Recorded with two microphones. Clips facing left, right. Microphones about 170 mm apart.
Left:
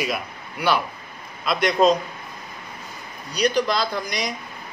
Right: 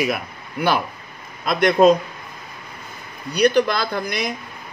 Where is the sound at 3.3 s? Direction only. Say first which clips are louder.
Right 4 dB; 60° right (ahead or behind).